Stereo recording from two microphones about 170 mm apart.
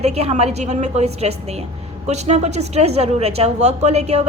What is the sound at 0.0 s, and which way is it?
A woman's voice, 40° right (ahead or behind).